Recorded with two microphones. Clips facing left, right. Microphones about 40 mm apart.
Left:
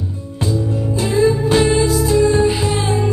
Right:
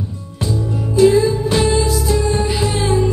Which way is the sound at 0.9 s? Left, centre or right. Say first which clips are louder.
Right 4 dB; left.